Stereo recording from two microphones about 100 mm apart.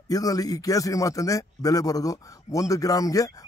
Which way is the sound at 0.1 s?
40° left (ahead or behind).